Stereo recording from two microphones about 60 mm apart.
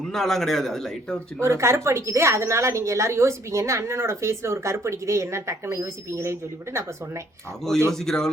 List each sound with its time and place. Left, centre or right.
0.1 s a man's voice: centre
1.4 s speech: right
7.9 s a man's voice: centre